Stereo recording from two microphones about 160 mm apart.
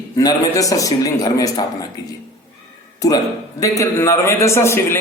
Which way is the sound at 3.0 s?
20° left (ahead or behind).